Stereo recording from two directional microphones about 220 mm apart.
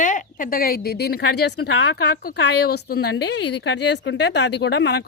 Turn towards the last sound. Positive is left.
turn(degrees=50)  # may be behind; listen again after turning